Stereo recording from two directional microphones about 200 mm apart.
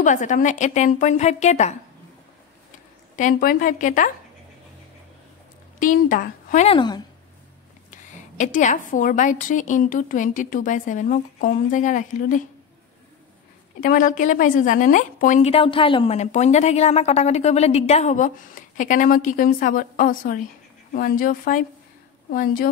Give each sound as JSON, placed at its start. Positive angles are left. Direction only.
{"t": 0.0, "sound": "a woman's voice", "side_deg": 40}
{"t": 3.2, "sound": "a woman's voice", "side_deg": 45}
{"t": 5.8, "sound": "speech", "side_deg": 40}
{"t": 7.9, "sound": "a woman's voice", "side_deg": 40}
{"t": 13.7, "sound": "a woman's voice", "side_deg": 40}